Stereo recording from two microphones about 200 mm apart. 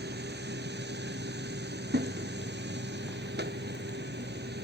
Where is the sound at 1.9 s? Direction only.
55° right (ahead or behind).